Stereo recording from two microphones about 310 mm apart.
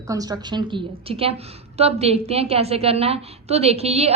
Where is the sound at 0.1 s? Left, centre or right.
Centre.